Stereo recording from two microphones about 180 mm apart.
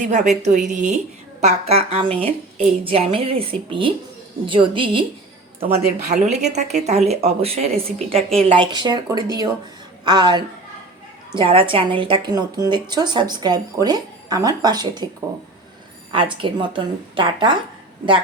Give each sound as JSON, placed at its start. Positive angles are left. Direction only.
{"t": 0.0, "sound": "a woman's voice", "side_deg": -45}
{"t": 5.6, "sound": "speech", "side_deg": -40}
{"t": 8.1, "sound": "speech", "side_deg": 0}
{"t": 8.4, "sound": "a woman's voice", "side_deg": -25}
{"t": 16.1, "sound": "a woman's voice", "side_deg": -25}